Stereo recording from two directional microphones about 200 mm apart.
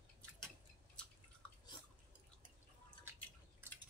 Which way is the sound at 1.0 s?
5° left (ahead or behind).